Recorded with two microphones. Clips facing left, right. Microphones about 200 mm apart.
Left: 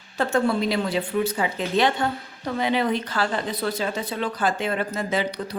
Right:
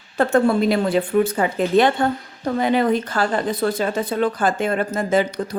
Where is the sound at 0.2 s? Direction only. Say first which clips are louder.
Right 5 dB; 55° right (ahead or behind).